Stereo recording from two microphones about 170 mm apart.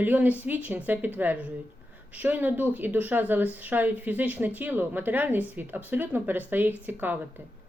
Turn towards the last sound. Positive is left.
turn(degrees=-10)  # may be behind; listen again after turning